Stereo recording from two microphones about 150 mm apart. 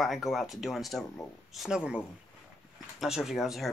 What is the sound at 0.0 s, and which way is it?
Speech, centre (ahead or behind).